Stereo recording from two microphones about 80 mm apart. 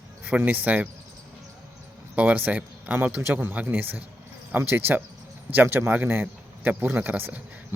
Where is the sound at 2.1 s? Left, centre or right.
Centre.